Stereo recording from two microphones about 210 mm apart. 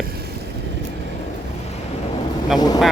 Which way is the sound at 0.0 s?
50° right (ahead or behind).